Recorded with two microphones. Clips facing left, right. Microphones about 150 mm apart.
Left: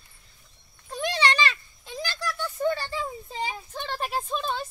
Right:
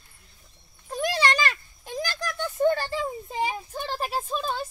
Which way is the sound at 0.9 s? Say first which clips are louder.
Right 1 dB; 40° right (ahead or behind).